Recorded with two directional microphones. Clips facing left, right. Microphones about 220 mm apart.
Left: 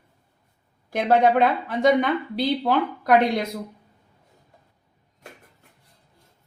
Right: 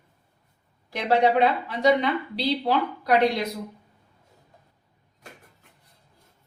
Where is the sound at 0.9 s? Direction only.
50° left (ahead or behind).